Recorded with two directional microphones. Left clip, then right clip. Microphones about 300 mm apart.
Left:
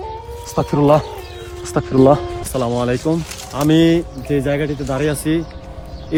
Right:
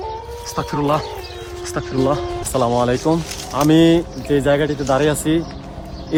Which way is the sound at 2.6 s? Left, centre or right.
Centre.